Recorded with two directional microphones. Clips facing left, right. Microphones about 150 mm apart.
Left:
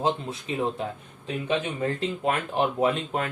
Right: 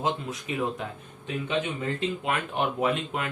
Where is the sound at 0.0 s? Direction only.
30° left (ahead or behind).